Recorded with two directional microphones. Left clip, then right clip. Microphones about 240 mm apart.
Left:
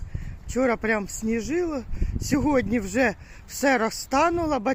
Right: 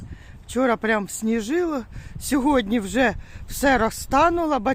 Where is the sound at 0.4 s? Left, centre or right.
Centre.